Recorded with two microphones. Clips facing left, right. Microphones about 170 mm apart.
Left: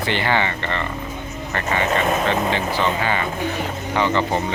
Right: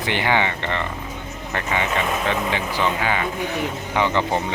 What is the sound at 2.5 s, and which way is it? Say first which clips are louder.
Speech: left 2 dB; 15° right (ahead or behind).